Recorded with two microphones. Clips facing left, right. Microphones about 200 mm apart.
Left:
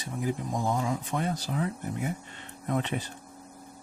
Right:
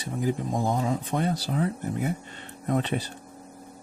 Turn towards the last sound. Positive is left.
turn(degrees=-35)  # may be behind; listen again after turning